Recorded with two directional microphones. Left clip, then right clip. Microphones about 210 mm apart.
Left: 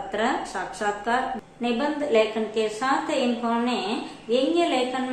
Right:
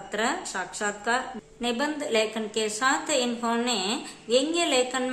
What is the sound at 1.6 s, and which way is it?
A woman's voice, 25° right (ahead or behind).